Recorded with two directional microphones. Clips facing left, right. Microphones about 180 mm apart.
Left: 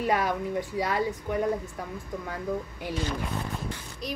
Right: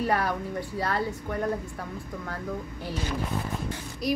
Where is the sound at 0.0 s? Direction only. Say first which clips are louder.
Left 1 dB; 15° left (ahead or behind).